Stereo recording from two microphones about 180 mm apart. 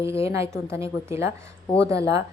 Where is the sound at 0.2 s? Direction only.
15° right (ahead or behind).